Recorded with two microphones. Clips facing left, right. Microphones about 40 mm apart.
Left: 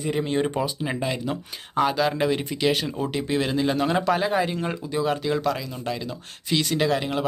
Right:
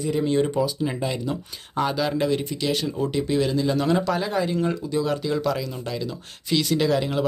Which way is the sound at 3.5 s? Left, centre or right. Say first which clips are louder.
Even; left.